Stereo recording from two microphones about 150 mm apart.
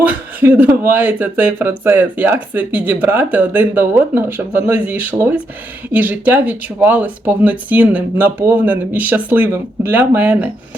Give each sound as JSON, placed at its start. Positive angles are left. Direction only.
{"t": 0.0, "sound": "speech", "side_deg": -10}